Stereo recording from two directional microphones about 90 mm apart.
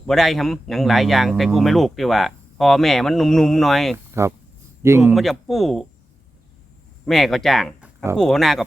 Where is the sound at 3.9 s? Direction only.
30° right (ahead or behind).